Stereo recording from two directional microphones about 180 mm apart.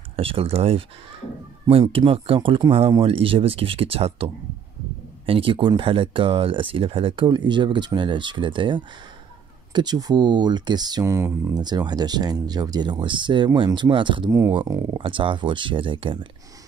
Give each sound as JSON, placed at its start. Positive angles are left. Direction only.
{"t": 0.1, "sound": "speech", "side_deg": -30}